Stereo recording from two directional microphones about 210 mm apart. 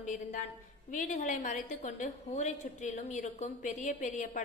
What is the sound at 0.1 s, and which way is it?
A woman's voice, 35° left (ahead or behind).